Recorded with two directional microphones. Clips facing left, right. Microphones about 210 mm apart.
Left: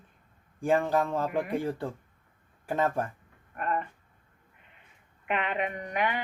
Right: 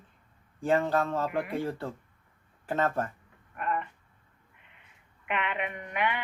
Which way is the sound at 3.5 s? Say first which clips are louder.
Left 1 dB; 40° left (ahead or behind).